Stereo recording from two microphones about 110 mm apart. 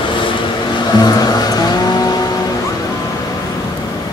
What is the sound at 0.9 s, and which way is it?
Music, 40° left (ahead or behind).